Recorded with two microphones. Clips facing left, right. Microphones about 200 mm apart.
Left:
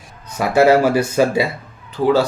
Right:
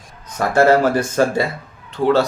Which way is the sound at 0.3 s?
10° left (ahead or behind).